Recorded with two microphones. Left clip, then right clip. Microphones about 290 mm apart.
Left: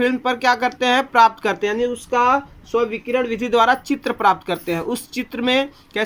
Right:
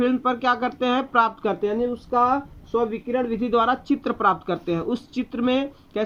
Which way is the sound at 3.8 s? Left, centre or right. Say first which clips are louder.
Left 4 dB; centre.